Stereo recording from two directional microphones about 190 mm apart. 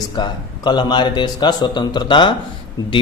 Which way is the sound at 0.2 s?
25° left (ahead or behind).